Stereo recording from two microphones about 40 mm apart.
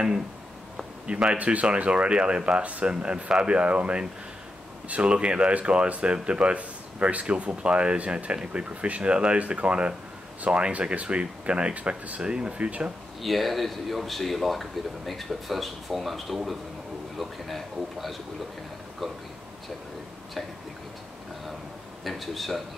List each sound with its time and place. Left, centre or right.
1.1 s speech: right
13.2 s speech: centre
22.0 s speech: centre